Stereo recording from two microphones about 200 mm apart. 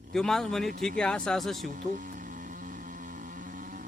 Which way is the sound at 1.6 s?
40° right (ahead or behind).